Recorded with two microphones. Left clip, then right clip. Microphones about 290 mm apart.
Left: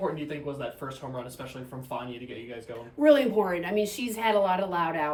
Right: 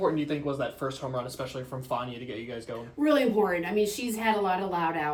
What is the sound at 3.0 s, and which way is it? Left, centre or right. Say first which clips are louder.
A woman's voice: left 3 dB; centre.